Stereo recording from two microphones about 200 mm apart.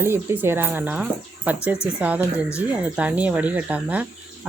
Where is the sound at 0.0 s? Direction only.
10° right (ahead or behind).